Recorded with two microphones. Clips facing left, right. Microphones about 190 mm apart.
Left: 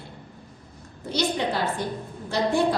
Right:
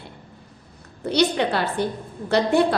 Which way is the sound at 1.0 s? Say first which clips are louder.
Right 5 dB; 65° right (ahead or behind).